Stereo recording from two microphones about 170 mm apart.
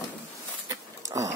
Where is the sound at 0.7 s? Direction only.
20° right (ahead or behind).